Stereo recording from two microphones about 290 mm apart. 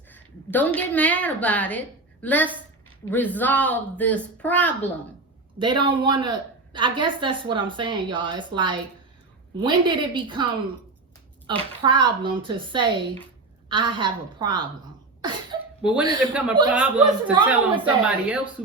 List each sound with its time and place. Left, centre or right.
0.1 s a woman's voice: centre
5.5 s a woman's voice: centre
16.0 s speech: centre